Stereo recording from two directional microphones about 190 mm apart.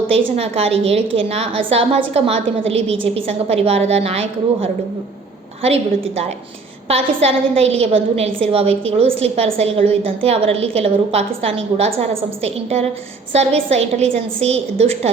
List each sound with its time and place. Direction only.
0.3 s a woman's voice: 30° right (ahead or behind)